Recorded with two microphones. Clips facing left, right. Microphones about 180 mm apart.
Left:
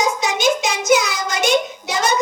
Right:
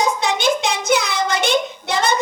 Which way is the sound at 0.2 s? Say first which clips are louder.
Even; 60° right (ahead or behind).